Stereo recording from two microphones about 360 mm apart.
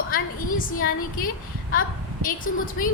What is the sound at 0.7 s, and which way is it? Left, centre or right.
Speech, left.